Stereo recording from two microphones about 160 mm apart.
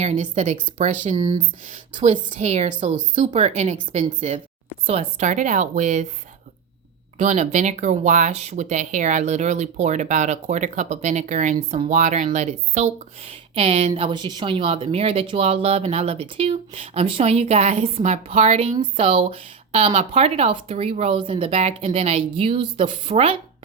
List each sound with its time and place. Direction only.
0.0 s speech: 45° right (ahead or behind)
1.1 s speech: 25° right (ahead or behind)
1.7 s speech: 50° right (ahead or behind)
7.2 s speech: 50° right (ahead or behind)